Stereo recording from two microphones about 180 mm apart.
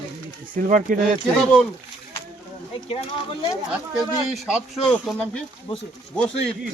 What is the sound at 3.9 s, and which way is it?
Speech, centre (ahead or behind).